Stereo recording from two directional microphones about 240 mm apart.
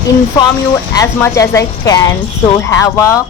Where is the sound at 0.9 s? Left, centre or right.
Centre.